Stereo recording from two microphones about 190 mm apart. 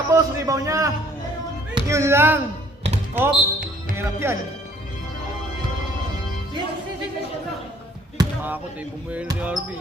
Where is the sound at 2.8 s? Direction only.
35° right (ahead or behind).